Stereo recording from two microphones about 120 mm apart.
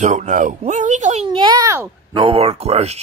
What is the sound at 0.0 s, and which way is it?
Speech, 85° right.